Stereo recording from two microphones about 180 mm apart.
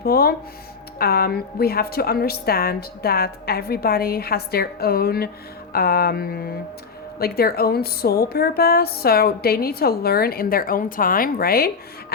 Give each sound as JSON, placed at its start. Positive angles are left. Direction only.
{"t": 0.0, "sound": "a woman's voice", "side_deg": 60}